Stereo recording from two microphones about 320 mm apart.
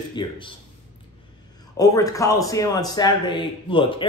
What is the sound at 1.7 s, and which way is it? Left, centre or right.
Speech, centre.